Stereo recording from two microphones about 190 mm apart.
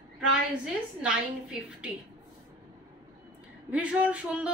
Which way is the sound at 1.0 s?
5° right (ahead or behind).